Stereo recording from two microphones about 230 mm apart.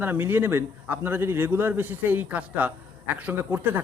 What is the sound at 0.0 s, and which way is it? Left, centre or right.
Speech, centre.